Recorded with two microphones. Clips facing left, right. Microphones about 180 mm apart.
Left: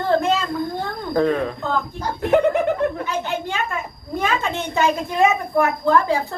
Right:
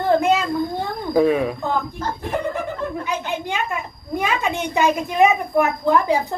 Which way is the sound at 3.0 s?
15° right (ahead or behind).